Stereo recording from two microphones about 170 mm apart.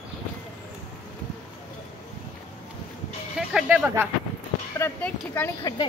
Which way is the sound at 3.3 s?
5° right (ahead or behind).